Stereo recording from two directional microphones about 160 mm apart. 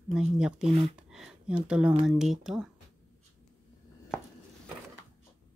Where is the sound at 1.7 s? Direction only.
5° right (ahead or behind).